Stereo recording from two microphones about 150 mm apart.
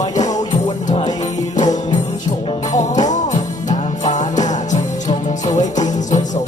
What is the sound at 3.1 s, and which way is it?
Music, 50° left (ahead or behind).